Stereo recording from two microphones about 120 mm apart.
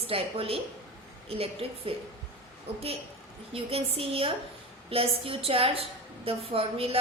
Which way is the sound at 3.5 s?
55° right (ahead or behind).